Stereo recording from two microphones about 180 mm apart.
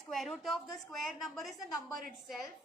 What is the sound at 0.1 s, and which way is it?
A woman's voice, centre (ahead or behind).